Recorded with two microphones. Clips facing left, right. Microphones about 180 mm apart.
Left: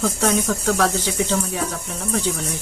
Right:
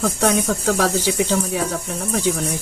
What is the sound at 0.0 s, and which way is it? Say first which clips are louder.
Speech: right 1 dB; centre (ahead or behind).